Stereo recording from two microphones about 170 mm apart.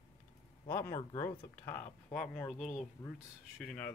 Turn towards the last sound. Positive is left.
turn(degrees=10)  # may be behind; listen again after turning